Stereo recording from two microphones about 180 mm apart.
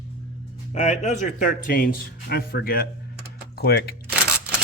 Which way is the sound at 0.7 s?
40° left (ahead or behind).